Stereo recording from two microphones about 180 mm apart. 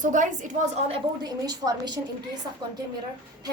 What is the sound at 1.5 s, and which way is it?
Speech, 20° right (ahead or behind).